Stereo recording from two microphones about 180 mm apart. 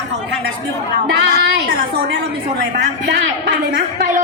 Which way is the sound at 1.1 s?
70° right (ahead or behind).